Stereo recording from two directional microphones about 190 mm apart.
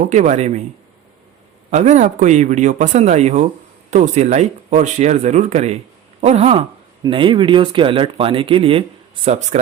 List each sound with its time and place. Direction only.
0.1 s speech: 40° right (ahead or behind)
1.7 s speech: 40° right (ahead or behind)